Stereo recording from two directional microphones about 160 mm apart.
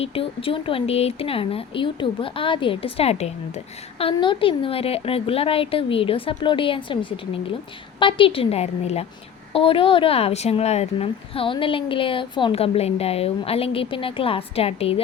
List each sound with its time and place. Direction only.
0.0 s speech: 35° left (ahead or behind)